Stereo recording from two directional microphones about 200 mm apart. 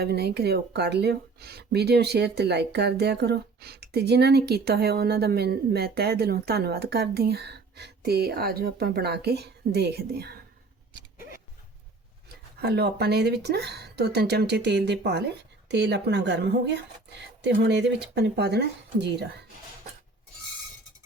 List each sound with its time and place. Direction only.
0.0 s speech: 55° right (ahead or behind)
12.5 s speech: 55° right (ahead or behind)